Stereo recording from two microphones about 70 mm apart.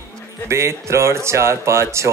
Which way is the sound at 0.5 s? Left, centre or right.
Right.